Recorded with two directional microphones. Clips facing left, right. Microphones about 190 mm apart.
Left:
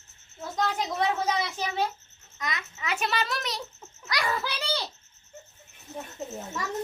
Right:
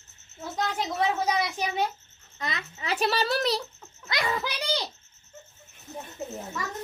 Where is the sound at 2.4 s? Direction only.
30° right (ahead or behind).